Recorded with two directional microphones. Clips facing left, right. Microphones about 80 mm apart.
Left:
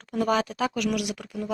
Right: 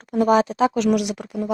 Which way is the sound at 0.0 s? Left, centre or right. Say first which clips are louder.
Right 7 dB; right.